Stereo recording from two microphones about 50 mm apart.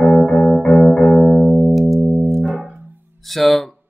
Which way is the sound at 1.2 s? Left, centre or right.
Right.